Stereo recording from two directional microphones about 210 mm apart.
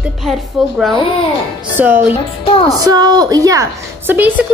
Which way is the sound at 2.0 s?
25° left (ahead or behind).